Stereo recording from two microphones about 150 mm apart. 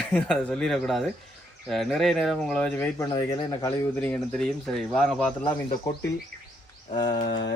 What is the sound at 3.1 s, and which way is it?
Speech, 25° left (ahead or behind).